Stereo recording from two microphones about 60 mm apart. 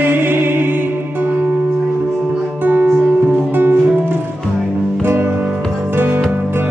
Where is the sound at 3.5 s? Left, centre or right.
Right.